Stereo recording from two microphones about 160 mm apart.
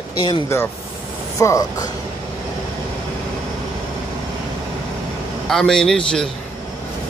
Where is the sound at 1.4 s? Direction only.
20° left (ahead or behind).